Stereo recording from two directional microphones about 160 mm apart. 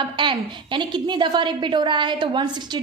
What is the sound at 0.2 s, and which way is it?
A woman's voice, 30° right (ahead or behind).